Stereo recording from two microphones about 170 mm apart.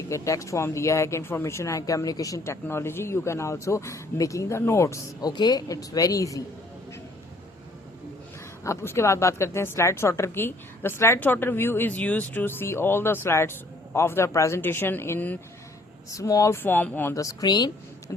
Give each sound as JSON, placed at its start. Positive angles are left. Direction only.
{"t": 0.1, "sound": "a woman's voice", "side_deg": 20}
{"t": 8.6, "sound": "a woman's voice", "side_deg": 15}